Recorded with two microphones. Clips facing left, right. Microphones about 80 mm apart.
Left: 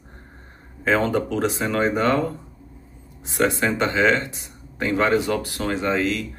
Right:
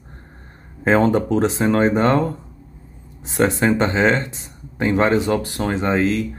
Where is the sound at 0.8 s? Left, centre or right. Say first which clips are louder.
Right 4 dB; right.